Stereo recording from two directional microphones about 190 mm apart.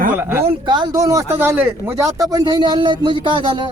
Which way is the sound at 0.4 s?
25° right (ahead or behind).